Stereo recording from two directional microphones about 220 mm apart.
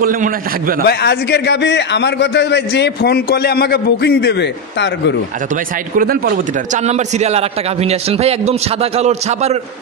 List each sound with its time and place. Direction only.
0.0 s speech: 40° right (ahead or behind)
0.8 s a man's voice: 50° left (ahead or behind)
5.9 s speech: 40° right (ahead or behind)
6.8 s a man's voice: 30° right (ahead or behind)